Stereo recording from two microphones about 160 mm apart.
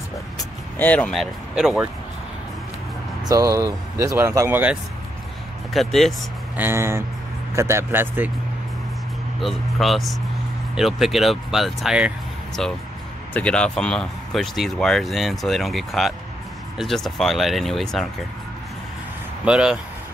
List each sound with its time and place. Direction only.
0.4 s speech: 10° left (ahead or behind); by 1.9 s 5° right (ahead or behind)
3.3 s speech: 20° right (ahead or behind)
5.7 s speech: centre (ahead or behind)
6.5 s speech: 15° right (ahead or behind)
9.4 s speech: centre (ahead or behind)
13.3 s speech: 5° left (ahead or behind)
19.4 s speech: 5° right (ahead or behind)